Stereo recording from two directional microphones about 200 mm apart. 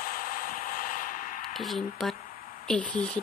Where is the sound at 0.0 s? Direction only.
45° left (ahead or behind).